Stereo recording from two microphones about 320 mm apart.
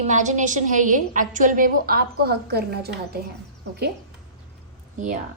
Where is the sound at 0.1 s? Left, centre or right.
Right.